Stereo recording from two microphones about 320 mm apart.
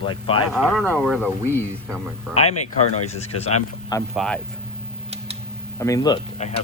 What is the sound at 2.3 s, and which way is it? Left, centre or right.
Speech, centre.